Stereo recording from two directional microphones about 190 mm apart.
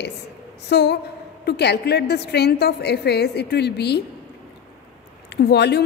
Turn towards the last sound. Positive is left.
turn(degrees=60)  # may be behind; listen again after turning